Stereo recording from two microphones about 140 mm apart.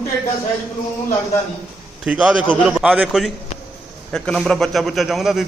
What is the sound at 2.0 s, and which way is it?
A man's voice, 5° right (ahead or behind).